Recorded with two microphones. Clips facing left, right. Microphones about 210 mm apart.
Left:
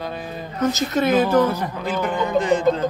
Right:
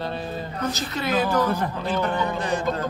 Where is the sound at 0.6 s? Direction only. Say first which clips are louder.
Left 9 dB; 50° left (ahead or behind).